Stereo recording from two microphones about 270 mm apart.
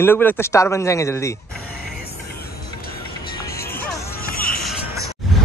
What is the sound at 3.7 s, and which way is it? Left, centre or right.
Music, centre.